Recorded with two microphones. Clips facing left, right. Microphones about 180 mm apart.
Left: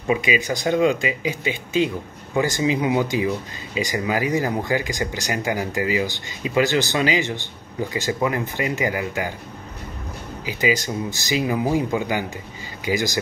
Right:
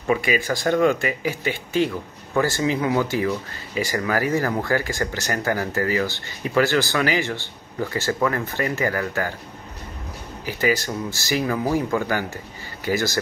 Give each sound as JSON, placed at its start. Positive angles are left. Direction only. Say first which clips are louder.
{"t": 0.1, "sound": "speech", "louder": "even", "side_deg": 15}
{"t": 10.4, "sound": "speech", "louder": "even", "side_deg": 15}